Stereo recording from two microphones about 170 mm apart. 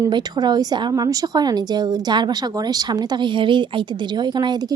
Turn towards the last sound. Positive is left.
turn(degrees=-25)  # may be behind; listen again after turning